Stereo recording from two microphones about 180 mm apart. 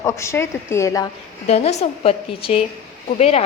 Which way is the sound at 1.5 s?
35° left (ahead or behind).